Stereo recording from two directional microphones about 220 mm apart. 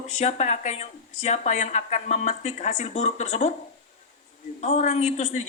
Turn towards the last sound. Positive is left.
turn(degrees=30)  # may be behind; listen again after turning